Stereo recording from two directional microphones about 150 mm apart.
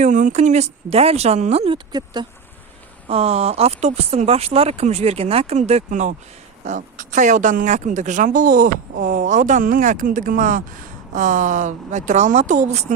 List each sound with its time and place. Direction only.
0.0 s speech: 55° right (ahead or behind)
1.9 s speech: 30° right (ahead or behind)
3.1 s speech: 45° right (ahead or behind)